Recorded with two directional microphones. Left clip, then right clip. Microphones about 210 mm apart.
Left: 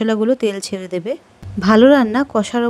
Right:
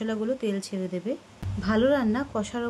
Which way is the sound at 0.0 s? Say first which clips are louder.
Left 12 dB; 45° left (ahead or behind).